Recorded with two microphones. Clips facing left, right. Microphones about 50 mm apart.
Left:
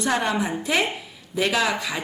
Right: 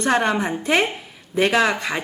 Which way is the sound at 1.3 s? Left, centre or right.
Right.